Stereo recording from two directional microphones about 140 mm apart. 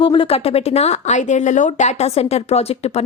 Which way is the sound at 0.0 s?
40° left (ahead or behind).